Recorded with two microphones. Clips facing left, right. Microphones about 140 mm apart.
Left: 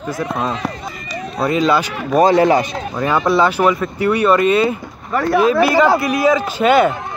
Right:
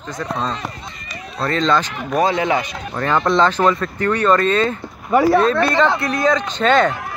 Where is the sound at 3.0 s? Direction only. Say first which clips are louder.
Left 1 dB; 5° left (ahead or behind).